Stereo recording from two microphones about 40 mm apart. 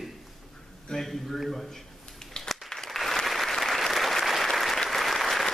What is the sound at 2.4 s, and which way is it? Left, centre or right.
Applause, centre.